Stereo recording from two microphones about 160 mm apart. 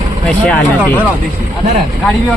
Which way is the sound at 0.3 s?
5° left (ahead or behind).